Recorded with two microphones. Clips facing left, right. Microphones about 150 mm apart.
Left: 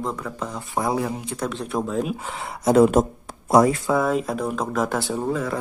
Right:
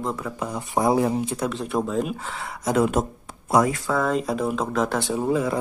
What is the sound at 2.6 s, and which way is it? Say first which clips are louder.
Speech: left 6 dB; 35° left (ahead or behind).